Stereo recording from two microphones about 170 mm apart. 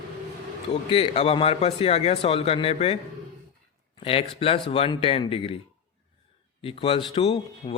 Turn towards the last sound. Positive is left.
turn(degrees=35)  # may be behind; listen again after turning